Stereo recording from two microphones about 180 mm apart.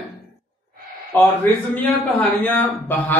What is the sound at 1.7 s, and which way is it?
A man's voice, 5° left (ahead or behind).